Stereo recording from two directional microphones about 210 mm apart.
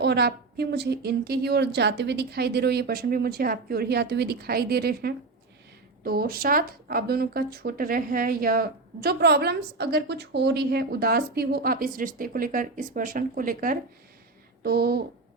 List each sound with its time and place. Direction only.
0.0 s speech: 50° right (ahead or behind)